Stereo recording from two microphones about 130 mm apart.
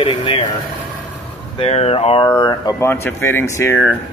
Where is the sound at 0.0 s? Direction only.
40° left (ahead or behind).